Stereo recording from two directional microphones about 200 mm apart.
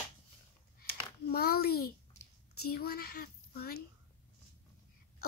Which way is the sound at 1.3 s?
50° left (ahead or behind).